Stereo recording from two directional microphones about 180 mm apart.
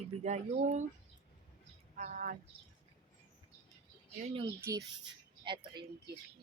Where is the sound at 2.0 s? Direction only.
45° right (ahead or behind).